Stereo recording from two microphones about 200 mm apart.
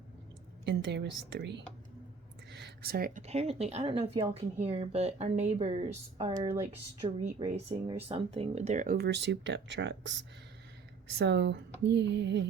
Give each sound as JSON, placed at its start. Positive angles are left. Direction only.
{"t": 0.6, "sound": "speech", "side_deg": -60}
{"t": 2.5, "sound": "a sound", "side_deg": -55}
{"t": 3.2, "sound": "speech", "side_deg": -35}
{"t": 6.1, "sound": "speech", "side_deg": -20}
{"t": 11.2, "sound": "speech", "side_deg": -60}